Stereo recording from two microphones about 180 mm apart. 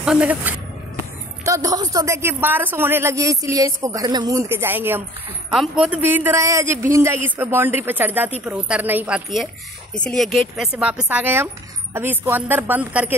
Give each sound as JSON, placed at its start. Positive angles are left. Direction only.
{"t": 0.0, "sound": "speech", "side_deg": -5}